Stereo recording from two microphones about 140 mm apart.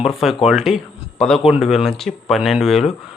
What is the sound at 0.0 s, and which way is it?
Speech, centre (ahead or behind).